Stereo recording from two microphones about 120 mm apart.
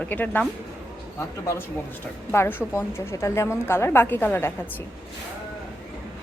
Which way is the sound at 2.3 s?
20° left (ahead or behind).